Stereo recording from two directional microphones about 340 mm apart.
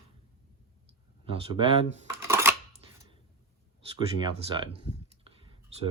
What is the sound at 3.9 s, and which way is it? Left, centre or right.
Speech, centre.